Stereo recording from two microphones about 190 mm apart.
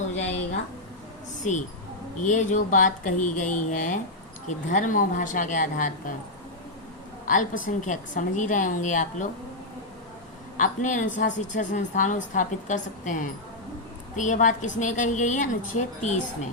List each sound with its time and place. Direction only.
2.2 s a woman's voice: 40° left (ahead or behind)
7.3 s a woman's voice: 45° left (ahead or behind)
10.6 s a woman's voice: 40° left (ahead or behind)